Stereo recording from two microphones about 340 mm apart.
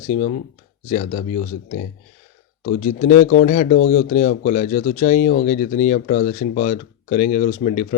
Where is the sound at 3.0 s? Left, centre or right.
Left.